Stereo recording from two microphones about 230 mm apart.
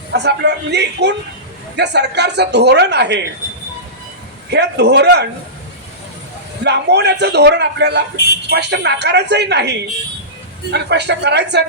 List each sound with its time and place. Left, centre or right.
0.1 s speech: right
4.5 s speech: right
6.7 s speech: right